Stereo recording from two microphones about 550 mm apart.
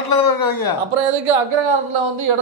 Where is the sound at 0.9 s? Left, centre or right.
Right.